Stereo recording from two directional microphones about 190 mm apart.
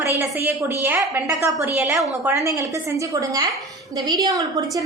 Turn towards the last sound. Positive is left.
turn(degrees=-20)  # may be behind; listen again after turning